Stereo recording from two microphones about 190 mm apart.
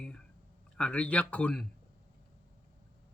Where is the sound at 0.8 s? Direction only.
5° left (ahead or behind).